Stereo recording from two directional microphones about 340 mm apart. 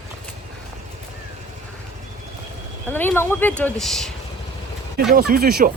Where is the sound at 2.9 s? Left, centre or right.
Centre.